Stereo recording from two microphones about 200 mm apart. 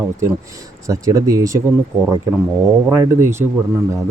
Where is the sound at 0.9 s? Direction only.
15° right (ahead or behind).